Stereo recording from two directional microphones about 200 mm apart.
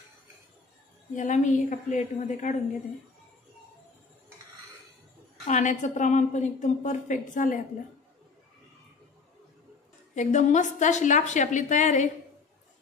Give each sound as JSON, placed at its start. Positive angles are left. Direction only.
{"t": 1.1, "sound": "a woman's voice", "side_deg": 35}
{"t": 5.4, "sound": "a woman's voice", "side_deg": 35}
{"t": 10.1, "sound": "a woman's voice", "side_deg": 40}